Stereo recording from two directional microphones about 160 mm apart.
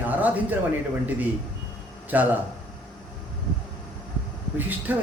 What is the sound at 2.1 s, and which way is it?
Speech, 10° right (ahead or behind).